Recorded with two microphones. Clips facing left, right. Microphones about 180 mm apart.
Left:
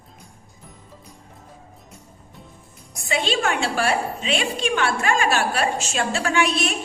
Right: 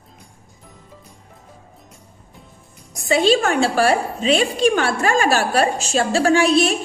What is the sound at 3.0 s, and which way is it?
A woman's voice, 40° right (ahead or behind).